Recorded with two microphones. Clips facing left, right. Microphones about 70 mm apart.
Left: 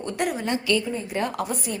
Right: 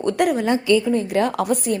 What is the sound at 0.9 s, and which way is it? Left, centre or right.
Speech, right.